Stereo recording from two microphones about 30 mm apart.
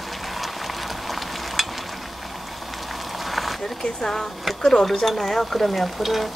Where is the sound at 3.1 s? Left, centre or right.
Centre.